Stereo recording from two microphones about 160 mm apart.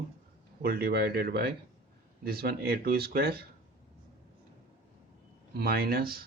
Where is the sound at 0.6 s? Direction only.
75° right (ahead or behind).